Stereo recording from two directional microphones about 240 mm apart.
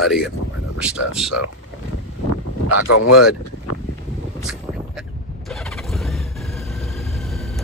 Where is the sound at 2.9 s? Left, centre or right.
Left.